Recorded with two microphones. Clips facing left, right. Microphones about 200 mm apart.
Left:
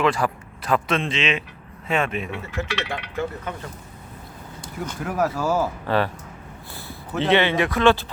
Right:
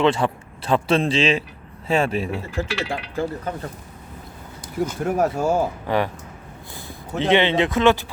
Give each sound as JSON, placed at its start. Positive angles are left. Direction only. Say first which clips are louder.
{"t": 0.0, "sound": "speech", "louder": "right 2 dB", "side_deg": -25}
{"t": 4.9, "sound": "speech", "louder": "right 2 dB", "side_deg": -30}
{"t": 5.8, "sound": "speech", "louder": "even", "side_deg": -15}
{"t": 7.2, "sound": "speech", "louder": "right 1 dB", "side_deg": -15}